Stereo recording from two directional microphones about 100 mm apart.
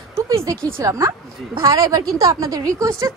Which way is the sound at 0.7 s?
35° right (ahead or behind).